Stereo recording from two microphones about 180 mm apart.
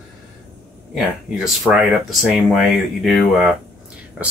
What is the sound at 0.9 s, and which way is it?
Speech, centre (ahead or behind).